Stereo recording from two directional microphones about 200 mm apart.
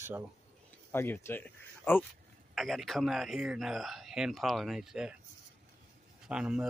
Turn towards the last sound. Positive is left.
turn(degrees=-5)  # may be behind; listen again after turning